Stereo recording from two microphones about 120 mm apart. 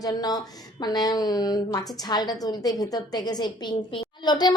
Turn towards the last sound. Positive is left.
turn(degrees=35)  # may be behind; listen again after turning